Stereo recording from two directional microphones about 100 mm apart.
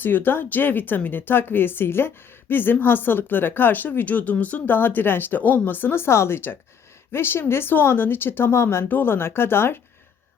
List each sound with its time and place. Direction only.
0.0 s speech: 20° left (ahead or behind)